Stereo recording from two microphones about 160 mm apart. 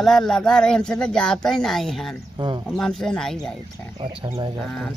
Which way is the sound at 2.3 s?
30° right (ahead or behind).